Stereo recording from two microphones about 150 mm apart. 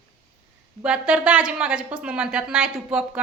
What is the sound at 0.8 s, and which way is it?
A woman's voice, 5° right (ahead or behind).